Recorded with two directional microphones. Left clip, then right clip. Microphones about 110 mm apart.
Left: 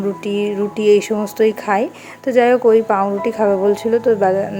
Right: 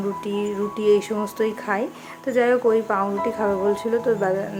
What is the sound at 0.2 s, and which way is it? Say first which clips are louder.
A woman's voice: left 6 dB; 45° left (ahead or behind).